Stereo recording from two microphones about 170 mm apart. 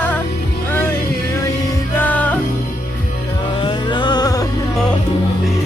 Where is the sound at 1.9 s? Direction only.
10° left (ahead or behind).